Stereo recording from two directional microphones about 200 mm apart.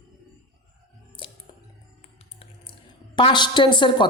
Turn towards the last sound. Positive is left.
turn(degrees=25)  # may be behind; listen again after turning